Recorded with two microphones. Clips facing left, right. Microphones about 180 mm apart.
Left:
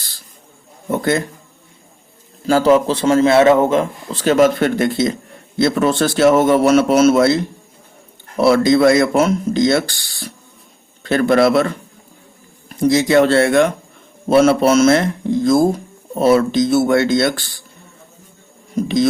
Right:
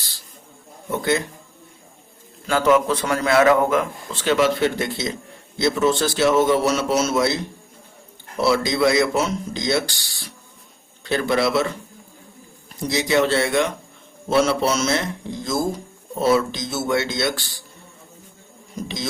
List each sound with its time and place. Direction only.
0.9 s speech: 50° left (ahead or behind)
2.5 s a man's voice: 35° left (ahead or behind); by 7.3 s 55° left (ahead or behind)
8.4 s a man's voice: 55° left (ahead or behind)